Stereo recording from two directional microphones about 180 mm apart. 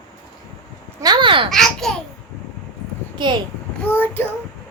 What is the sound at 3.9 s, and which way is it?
Child singing, 10° left (ahead or behind).